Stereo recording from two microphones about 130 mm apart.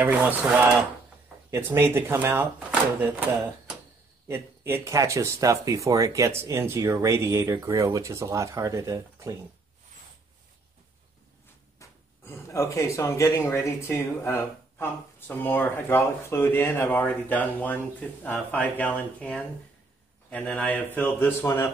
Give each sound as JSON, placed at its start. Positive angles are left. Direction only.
{"t": 0.0, "sound": "speech", "side_deg": -15}
{"t": 4.3, "sound": "speech", "side_deg": -20}
{"t": 11.8, "sound": "speech", "side_deg": 20}